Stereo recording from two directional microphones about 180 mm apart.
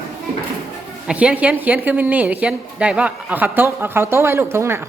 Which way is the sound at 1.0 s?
5° right (ahead or behind).